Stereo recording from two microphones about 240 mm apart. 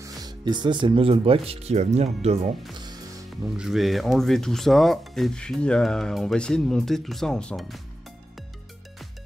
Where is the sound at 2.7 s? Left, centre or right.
Centre.